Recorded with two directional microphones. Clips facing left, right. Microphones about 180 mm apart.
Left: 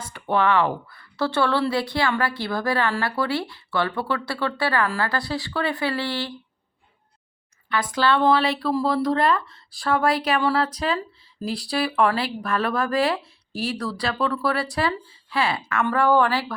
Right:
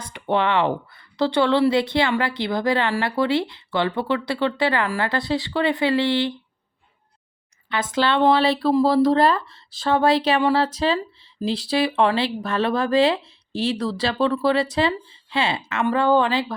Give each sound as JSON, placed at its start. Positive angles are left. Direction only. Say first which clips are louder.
{"t": 0.0, "sound": "speech", "louder": "even", "side_deg": -20}
{"t": 7.7, "sound": "speech", "louder": "even", "side_deg": -25}